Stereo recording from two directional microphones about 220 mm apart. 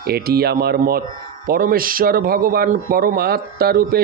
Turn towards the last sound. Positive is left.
turn(degrees=-45)  # may be behind; listen again after turning